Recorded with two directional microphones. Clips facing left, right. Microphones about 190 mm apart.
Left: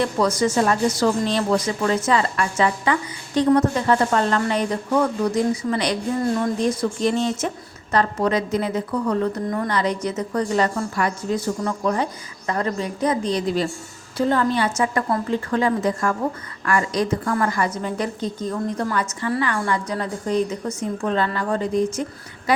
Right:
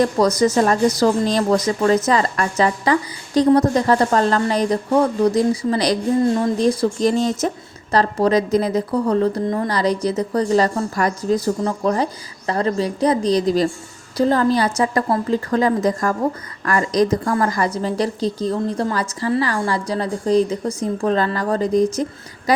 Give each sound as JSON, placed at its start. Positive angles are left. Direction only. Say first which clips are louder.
{"t": 0.0, "sound": "a woman's voice", "louder": "right 4 dB", "side_deg": -40}